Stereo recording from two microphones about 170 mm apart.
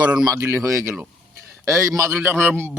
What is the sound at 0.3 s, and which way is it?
Speech, 20° right (ahead or behind).